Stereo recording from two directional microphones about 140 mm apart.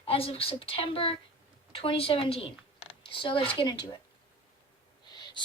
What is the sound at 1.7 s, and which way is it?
A woman's voice, 45° left (ahead or behind).